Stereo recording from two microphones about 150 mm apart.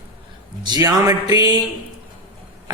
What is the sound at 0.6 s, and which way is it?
Speech, 25° right (ahead or behind).